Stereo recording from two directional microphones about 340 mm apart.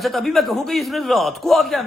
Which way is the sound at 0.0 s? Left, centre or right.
Centre.